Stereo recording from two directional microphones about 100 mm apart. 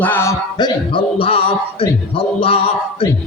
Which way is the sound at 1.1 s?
70° left (ahead or behind).